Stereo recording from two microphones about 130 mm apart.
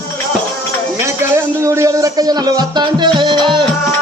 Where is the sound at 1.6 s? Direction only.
25° right (ahead or behind).